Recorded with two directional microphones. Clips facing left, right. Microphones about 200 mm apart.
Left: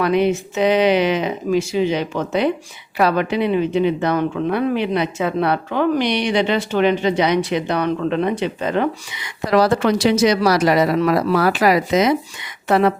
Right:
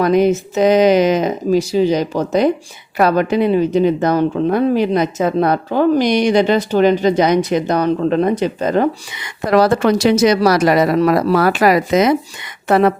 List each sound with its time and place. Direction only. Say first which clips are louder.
0.0 s a woman's voice: right 4 dB; 40° right (ahead or behind)